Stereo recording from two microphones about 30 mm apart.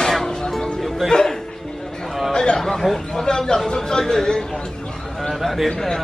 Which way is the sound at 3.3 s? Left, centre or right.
Left.